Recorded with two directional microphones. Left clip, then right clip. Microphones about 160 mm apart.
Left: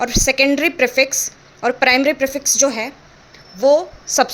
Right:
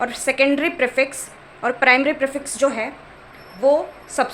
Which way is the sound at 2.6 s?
85° left.